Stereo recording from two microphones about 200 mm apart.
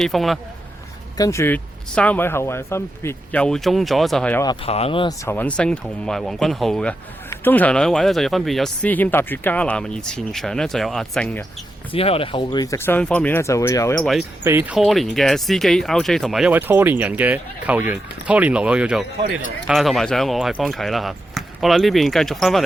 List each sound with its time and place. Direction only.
0.0 s speech: centre (ahead or behind)
1.1 s speech: 15° left (ahead or behind)
4.4 s speech: 30° left (ahead or behind)
5.2 s speech: 10° left (ahead or behind)
11.9 s speech: 30° left (ahead or behind)
14.4 s speech: 10° right (ahead or behind)
14.8 s speech: centre (ahead or behind)